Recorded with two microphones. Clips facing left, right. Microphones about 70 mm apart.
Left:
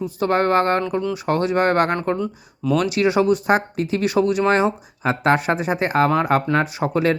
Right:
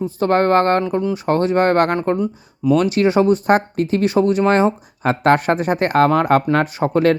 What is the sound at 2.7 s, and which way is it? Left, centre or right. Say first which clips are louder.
Speech: right 2 dB; right.